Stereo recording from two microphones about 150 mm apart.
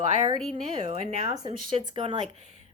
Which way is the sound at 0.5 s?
35° right (ahead or behind).